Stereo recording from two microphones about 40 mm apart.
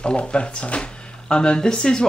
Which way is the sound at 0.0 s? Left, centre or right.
Left.